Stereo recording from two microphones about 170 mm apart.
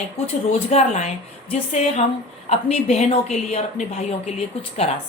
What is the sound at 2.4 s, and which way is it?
Speech, 40° left (ahead or behind).